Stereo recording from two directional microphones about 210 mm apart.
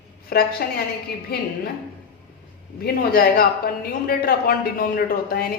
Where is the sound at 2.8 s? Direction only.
45° left (ahead or behind).